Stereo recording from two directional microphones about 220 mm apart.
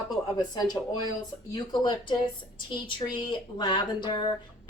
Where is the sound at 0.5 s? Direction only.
15° left (ahead or behind).